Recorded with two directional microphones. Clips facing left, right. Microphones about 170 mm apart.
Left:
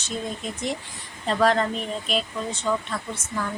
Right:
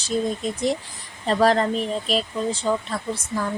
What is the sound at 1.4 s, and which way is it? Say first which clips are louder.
Speech: right 2 dB; 35° right (ahead or behind).